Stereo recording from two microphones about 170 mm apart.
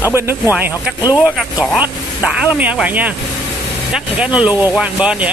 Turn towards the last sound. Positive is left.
turn(degrees=-5)  # may be behind; listen again after turning